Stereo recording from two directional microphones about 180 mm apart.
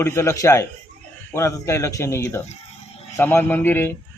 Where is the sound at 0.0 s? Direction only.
15° left (ahead or behind).